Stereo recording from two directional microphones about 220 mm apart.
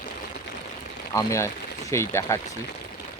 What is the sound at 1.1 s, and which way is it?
Speech, 15° left (ahead or behind).